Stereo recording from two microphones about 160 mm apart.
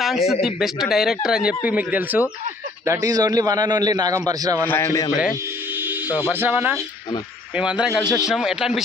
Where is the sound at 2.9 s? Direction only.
20° right (ahead or behind).